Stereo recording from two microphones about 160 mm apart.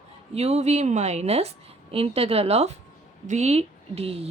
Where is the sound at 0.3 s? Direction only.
40° right (ahead or behind).